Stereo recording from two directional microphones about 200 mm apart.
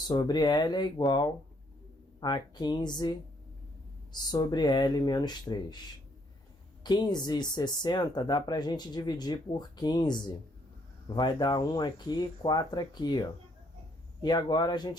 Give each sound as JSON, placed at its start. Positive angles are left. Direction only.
{"t": 0.1, "sound": "speech", "side_deg": 20}
{"t": 6.8, "sound": "speech", "side_deg": 20}